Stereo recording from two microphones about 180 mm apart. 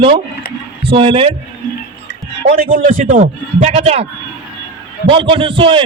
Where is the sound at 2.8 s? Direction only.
45° right (ahead or behind).